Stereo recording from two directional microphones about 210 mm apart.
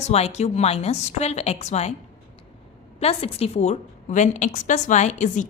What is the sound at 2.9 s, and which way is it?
A woman's voice, 30° left (ahead or behind).